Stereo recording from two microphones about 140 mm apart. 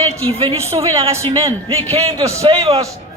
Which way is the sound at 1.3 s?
25° right (ahead or behind).